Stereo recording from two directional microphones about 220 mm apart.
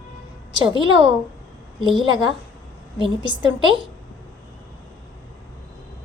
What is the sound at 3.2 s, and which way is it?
Speech, 20° right (ahead or behind).